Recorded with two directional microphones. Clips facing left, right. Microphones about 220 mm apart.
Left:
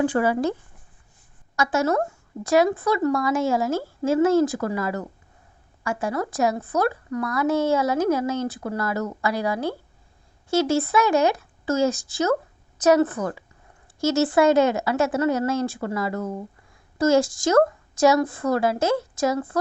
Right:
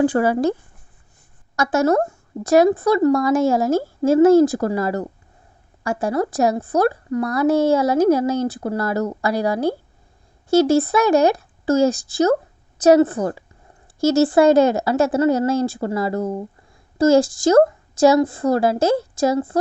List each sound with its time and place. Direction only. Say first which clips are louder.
0.0 s speech: right 4 dB; 35° right (ahead or behind)
1.5 s speech: right 5 dB; 45° right (ahead or behind)